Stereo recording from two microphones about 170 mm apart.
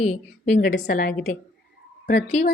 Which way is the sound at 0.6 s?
55° left (ahead or behind).